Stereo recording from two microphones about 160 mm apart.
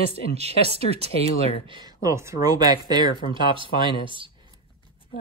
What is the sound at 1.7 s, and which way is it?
Speech, 25° right (ahead or behind).